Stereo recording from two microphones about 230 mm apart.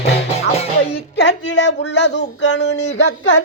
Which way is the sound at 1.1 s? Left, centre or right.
Left.